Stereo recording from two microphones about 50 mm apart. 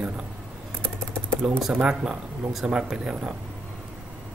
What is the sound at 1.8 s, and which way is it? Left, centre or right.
Speech, centre.